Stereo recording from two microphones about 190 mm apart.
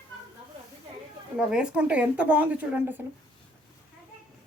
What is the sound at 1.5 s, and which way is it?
A woman's voice, 5° right (ahead or behind).